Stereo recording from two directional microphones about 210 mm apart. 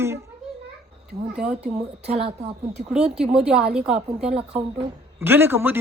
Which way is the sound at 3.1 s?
5° right (ahead or behind).